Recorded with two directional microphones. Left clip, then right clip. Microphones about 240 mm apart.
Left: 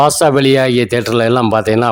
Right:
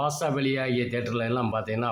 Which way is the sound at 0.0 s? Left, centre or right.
Left.